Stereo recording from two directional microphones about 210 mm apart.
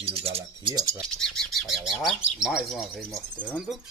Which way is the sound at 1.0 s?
5° left (ahead or behind).